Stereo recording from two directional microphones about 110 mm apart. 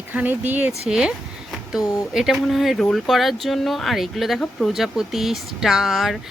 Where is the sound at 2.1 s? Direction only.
Centre (ahead or behind).